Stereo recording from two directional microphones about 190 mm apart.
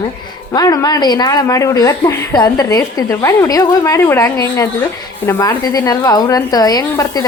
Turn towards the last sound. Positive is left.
turn(degrees=20)  # may be behind; listen again after turning